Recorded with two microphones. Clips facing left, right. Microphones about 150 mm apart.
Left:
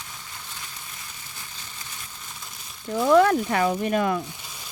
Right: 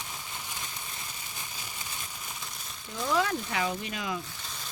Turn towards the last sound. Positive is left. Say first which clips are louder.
# even
turn(degrees=10)  # may be behind; listen again after turning